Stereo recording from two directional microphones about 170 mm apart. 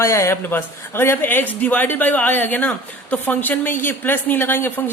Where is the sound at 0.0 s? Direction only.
15° left (ahead or behind).